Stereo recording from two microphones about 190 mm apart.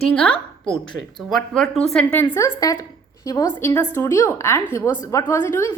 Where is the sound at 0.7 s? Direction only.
25° left (ahead or behind).